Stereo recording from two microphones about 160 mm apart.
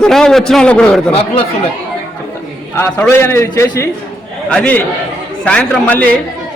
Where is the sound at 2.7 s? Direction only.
10° left (ahead or behind).